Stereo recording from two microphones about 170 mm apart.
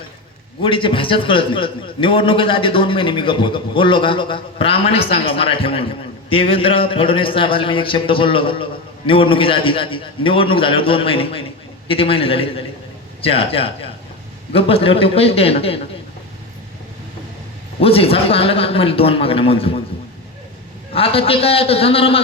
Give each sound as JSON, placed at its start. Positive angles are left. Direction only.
{"t": 0.6, "sound": "a man's voice", "side_deg": 30}
{"t": 17.7, "sound": "a man's voice", "side_deg": 35}
{"t": 20.9, "sound": "a man's voice", "side_deg": 35}